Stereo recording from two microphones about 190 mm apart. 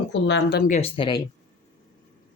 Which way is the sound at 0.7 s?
30° left (ahead or behind).